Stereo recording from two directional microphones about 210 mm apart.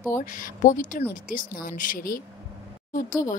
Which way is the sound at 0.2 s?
40° left (ahead or behind).